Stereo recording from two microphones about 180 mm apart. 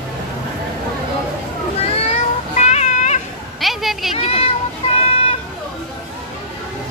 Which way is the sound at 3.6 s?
Centre (ahead or behind).